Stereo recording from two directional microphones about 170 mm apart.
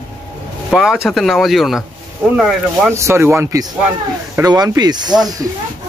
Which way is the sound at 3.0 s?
15° right (ahead or behind).